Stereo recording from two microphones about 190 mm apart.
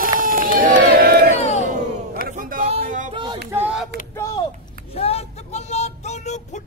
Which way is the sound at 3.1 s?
25° right (ahead or behind).